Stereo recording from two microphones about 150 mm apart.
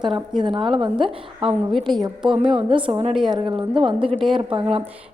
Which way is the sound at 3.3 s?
35° right (ahead or behind).